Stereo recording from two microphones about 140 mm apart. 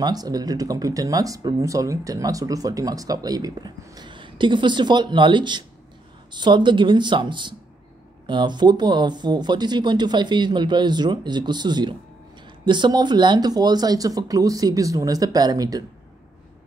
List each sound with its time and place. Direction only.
0.0 s speech: 30° right (ahead or behind)